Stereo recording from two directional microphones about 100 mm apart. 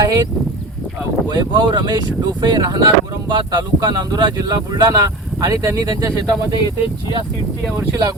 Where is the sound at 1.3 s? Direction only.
50° right (ahead or behind); by 6.2 s 30° right (ahead or behind).